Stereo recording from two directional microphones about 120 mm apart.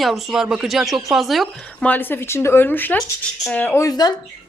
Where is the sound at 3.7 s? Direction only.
30° left (ahead or behind).